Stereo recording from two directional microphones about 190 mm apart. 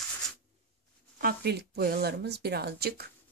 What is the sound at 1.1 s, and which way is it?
Speech, 55° right (ahead or behind).